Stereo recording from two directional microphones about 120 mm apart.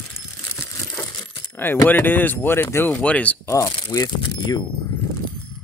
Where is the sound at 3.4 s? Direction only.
30° left (ahead or behind).